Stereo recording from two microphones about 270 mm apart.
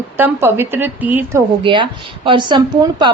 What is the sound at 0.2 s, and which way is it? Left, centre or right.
A woman's voice, centre.